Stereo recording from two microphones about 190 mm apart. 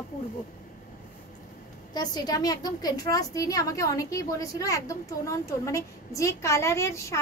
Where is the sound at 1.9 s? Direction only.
20° left (ahead or behind).